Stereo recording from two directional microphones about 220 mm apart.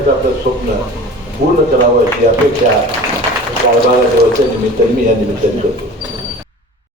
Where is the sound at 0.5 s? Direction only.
35° right (ahead or behind).